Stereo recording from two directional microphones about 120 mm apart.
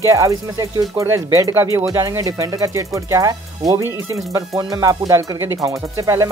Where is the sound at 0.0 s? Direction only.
25° right (ahead or behind).